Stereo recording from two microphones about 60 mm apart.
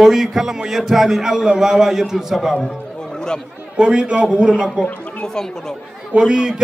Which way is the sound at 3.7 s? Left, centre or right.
Centre.